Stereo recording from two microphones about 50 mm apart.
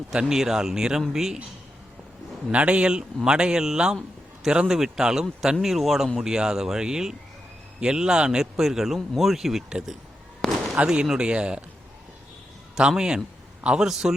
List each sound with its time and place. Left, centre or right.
0.1 s a man's voice: centre
2.5 s a man's voice: right
10.4 s fireworks: centre
10.8 s speech: centre
13.0 s a man's voice: centre